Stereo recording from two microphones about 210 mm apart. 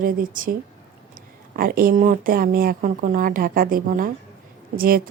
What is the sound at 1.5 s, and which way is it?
A woman's voice, 45° right (ahead or behind).